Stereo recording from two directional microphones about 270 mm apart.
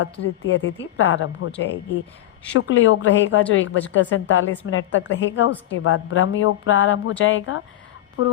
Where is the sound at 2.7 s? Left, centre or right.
Left.